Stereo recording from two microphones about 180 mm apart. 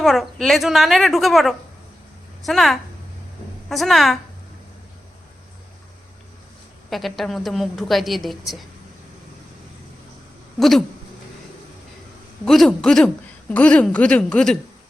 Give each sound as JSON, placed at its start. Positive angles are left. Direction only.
{"t": 0.0, "sound": "a woman's voice", "side_deg": 0}
{"t": 6.9, "sound": "a woman's voice", "side_deg": 0}
{"t": 10.6, "sound": "a woman's voice", "side_deg": 0}
{"t": 12.5, "sound": "a woman's voice", "side_deg": 0}